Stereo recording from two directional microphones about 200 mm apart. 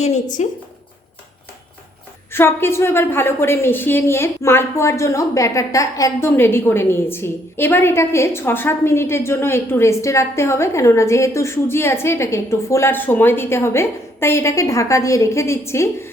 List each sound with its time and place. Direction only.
0.0 s speech: 35° left (ahead or behind)
2.3 s a woman's voice: 10° left (ahead or behind)